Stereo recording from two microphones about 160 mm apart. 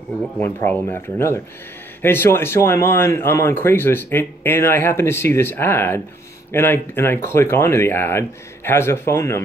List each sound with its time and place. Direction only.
0.4 s speech: 10° left (ahead or behind)